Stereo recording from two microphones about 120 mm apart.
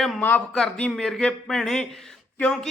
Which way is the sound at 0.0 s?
10° left (ahead or behind).